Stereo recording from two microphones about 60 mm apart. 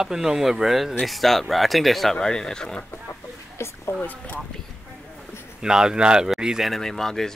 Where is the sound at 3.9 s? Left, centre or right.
Left.